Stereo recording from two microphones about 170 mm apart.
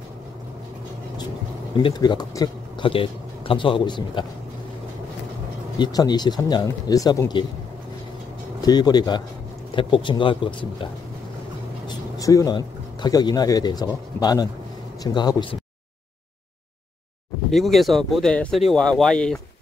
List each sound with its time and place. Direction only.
1.8 s a man's voice: 30° left (ahead or behind)
5.8 s a man's voice: 25° left (ahead or behind)
8.5 s a man's voice: 25° left (ahead or behind)
12.2 s a man's voice: 20° left (ahead or behind)
17.5 s speech: centre (ahead or behind)